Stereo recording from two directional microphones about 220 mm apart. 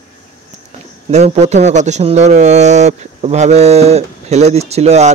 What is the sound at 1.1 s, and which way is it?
A man's voice, 30° right (ahead or behind).